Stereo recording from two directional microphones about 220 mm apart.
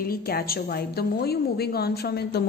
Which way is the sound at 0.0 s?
45° left (ahead or behind).